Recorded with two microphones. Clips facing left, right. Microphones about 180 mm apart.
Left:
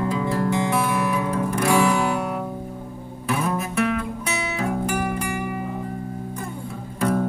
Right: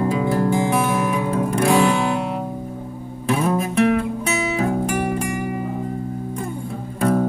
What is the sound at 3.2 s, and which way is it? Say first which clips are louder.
Guitar: right 5 dB; 30° right (ahead or behind).